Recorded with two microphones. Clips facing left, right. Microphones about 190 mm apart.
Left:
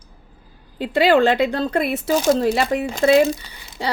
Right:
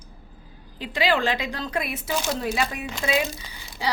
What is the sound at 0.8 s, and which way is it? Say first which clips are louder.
Speech: left 8 dB; 60° left (ahead or behind).